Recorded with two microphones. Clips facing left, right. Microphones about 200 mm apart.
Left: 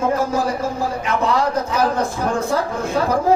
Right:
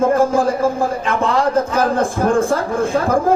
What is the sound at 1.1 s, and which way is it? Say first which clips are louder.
Speech: right 2 dB; 50° right (ahead or behind).